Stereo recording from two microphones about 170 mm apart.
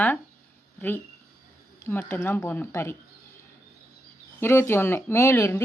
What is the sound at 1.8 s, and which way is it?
Speech, 15° left (ahead or behind).